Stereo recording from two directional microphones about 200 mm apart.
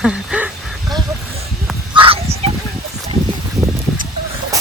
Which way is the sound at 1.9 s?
25° right (ahead or behind).